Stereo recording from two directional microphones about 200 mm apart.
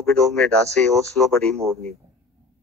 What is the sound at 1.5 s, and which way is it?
Speech, 30° right (ahead or behind).